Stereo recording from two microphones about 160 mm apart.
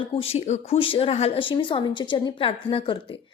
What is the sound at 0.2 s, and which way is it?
A woman's voice, 40° left (ahead or behind).